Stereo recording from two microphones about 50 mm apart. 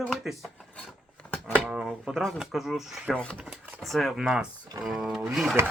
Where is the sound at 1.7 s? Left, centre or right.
Centre.